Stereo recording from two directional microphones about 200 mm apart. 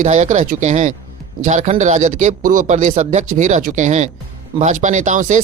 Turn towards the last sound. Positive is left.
turn(degrees=-40)  # may be behind; listen again after turning